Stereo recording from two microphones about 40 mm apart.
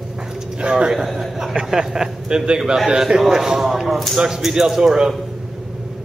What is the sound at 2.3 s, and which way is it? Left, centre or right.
A man's voice, right.